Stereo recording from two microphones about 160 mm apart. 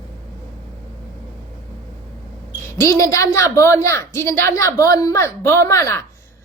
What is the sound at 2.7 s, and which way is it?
A woman's voice, 20° left (ahead or behind).